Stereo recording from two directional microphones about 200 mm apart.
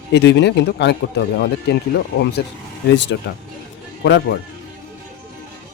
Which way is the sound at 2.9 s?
65° left (ahead or behind).